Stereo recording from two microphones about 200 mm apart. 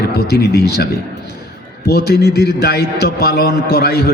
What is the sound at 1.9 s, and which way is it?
A man's voice, 50° left (ahead or behind).